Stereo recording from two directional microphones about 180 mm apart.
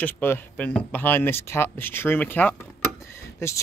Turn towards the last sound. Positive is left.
turn(degrees=15)  # may be behind; listen again after turning